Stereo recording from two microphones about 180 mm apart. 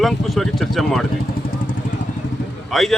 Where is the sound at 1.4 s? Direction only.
55° left (ahead or behind).